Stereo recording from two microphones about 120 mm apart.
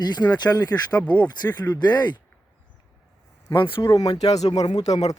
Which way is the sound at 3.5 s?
45° left (ahead or behind).